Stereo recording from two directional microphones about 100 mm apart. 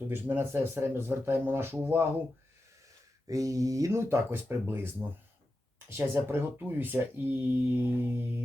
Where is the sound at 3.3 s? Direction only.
35° right (ahead or behind).